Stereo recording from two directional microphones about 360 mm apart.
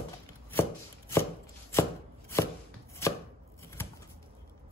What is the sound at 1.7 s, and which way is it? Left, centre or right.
Chopping, centre.